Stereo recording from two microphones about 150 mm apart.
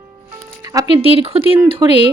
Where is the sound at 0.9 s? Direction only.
40° right (ahead or behind).